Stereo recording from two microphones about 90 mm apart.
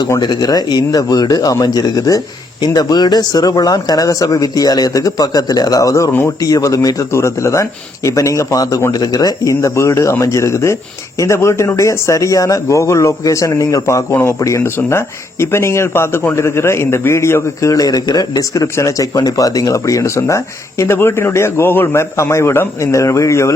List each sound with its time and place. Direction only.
0.2 s a man's voice: 50° left (ahead or behind); by 23.6 s 35° left (ahead or behind)